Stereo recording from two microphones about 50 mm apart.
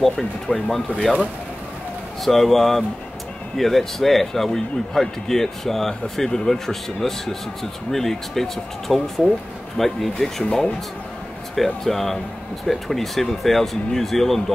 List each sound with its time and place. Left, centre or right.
0.0 s speech: centre
2.2 s speech: centre
11.5 s speech: centre